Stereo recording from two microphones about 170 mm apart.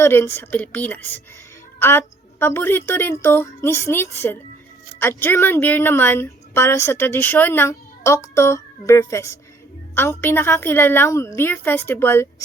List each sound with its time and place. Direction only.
0.0 s a woman's voice: 15° left (ahead or behind)